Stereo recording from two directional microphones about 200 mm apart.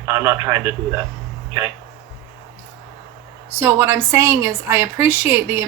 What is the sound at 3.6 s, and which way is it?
A woman's voice, 10° right (ahead or behind).